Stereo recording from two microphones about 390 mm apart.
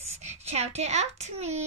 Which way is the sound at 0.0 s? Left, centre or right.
Centre.